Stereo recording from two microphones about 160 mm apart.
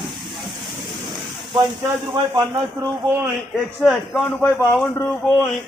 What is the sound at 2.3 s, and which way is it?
Speech, 20° right (ahead or behind).